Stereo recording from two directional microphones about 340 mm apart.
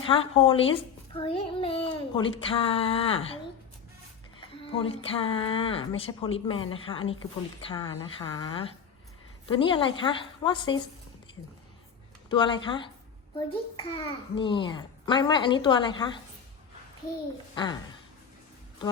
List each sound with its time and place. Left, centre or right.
0.1 s a child's voice: centre
4.4 s a child's voice: centre
12.3 s a child's voice: centre
17.5 s a woman's voice: centre